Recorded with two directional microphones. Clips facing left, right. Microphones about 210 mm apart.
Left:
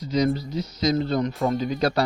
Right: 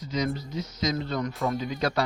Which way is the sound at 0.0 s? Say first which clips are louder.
Left 6 dB; 35° left (ahead or behind).